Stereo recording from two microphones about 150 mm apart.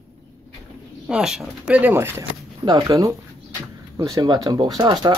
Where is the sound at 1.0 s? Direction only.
5° right (ahead or behind).